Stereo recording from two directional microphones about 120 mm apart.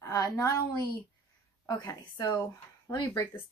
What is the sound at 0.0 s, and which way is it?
Speech, 25° left (ahead or behind).